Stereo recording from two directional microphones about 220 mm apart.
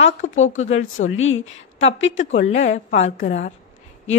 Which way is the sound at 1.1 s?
65° left (ahead or behind).